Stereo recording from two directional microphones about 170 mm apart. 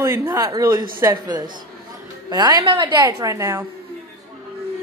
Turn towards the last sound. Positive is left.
turn(degrees=-20)  # may be behind; listen again after turning